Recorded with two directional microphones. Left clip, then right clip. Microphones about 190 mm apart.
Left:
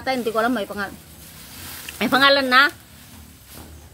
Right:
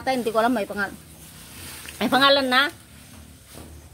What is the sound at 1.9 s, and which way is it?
Speech, centre (ahead or behind).